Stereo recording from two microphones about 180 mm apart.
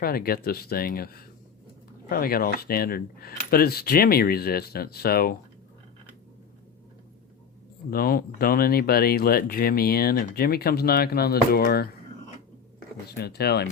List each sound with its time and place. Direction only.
0.0 s speech: 55° left (ahead or behind)
7.9 s speech: 55° left (ahead or behind)
13.1 s speech: 65° left (ahead or behind)